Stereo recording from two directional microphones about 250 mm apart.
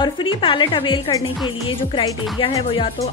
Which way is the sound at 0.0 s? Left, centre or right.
Centre.